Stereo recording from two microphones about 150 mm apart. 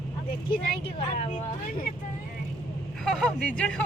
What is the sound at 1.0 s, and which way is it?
Speech, 45° left (ahead or behind).